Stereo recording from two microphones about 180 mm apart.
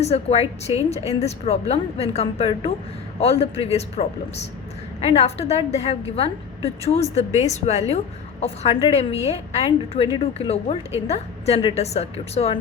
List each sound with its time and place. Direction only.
0.0 s a woman's voice: 35° left (ahead or behind)
5.0 s a woman's voice: 35° left (ahead or behind)